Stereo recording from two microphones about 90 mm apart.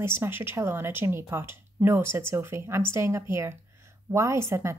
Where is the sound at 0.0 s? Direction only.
30° right (ahead or behind).